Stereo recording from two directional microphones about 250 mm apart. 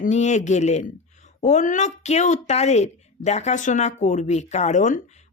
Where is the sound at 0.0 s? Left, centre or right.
Left.